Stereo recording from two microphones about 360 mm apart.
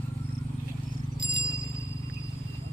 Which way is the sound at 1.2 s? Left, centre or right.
Left.